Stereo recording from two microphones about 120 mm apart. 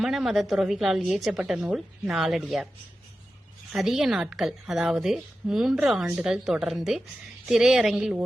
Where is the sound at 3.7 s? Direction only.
5° right (ahead or behind).